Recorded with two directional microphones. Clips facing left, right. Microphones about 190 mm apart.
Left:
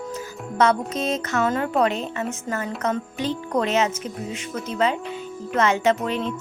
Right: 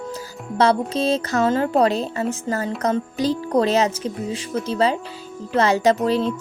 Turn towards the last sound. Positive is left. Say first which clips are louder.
# right 4 dB
turn(degrees=-35)  # may be behind; listen again after turning